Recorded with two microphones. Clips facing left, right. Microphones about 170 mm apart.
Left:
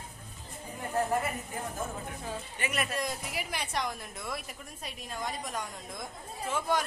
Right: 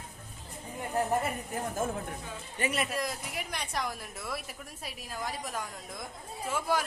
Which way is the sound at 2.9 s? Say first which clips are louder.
Even; centre (ahead or behind).